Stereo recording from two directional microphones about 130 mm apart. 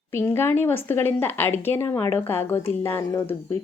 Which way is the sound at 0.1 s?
20° left (ahead or behind).